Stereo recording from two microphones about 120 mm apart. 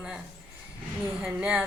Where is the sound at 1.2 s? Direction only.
5° right (ahead or behind).